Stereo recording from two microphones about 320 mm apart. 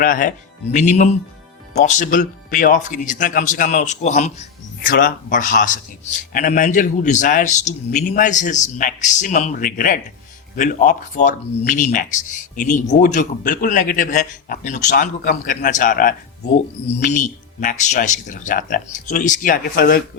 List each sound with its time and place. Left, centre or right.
0.0 s speech: left